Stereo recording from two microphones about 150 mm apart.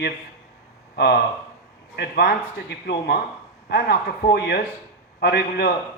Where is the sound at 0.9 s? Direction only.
90° left.